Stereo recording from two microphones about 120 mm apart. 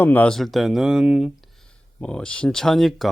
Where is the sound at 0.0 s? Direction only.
15° left (ahead or behind).